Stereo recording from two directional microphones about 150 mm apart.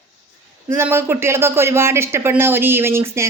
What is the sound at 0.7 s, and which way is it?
Speech, 15° right (ahead or behind).